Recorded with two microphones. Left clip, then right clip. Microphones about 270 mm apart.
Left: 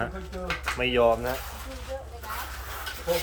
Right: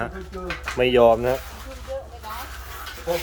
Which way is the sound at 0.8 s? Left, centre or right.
Right.